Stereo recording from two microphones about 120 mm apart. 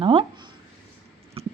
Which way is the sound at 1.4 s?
55° right (ahead or behind).